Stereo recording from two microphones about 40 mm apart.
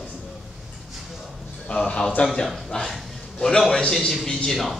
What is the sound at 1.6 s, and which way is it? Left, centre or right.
A man's voice, left.